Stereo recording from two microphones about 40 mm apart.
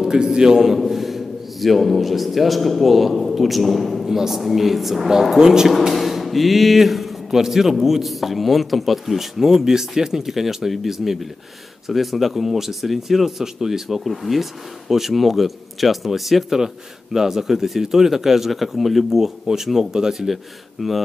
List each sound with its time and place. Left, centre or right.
0.0 s speech: centre
0.7 s a man's voice: centre
5.4 s speech: centre
5.7 s speech: centre